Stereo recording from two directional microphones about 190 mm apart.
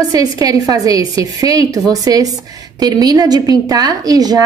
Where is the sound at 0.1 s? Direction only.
20° right (ahead or behind).